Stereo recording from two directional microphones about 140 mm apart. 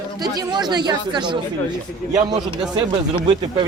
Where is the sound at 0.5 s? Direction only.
30° right (ahead or behind).